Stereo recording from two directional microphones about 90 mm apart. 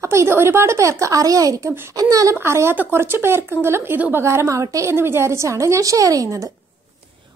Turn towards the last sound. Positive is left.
turn(degrees=-35)  # may be behind; listen again after turning